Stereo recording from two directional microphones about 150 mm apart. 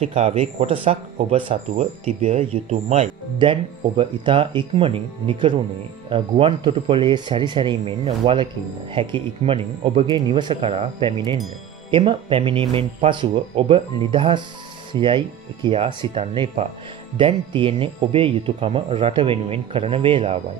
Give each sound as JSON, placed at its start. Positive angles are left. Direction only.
{"t": 0.0, "sound": "speech", "side_deg": -45}
{"t": 3.3, "sound": "speech", "side_deg": -35}
{"t": 10.0, "sound": "speech", "side_deg": -30}